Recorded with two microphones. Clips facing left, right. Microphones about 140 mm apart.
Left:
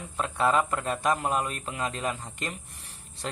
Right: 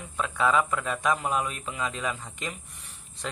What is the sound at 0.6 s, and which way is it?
Speech, 45° left (ahead or behind).